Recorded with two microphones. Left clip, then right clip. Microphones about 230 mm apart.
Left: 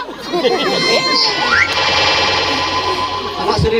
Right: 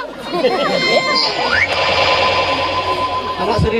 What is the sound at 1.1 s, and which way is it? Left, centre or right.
Speech, left.